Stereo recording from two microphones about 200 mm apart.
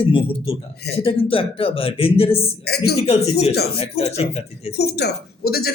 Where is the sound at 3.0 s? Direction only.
30° left (ahead or behind).